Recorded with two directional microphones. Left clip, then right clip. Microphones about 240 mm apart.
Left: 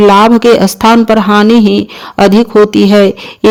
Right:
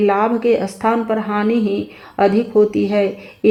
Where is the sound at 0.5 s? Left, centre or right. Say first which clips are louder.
Left 11 dB; left.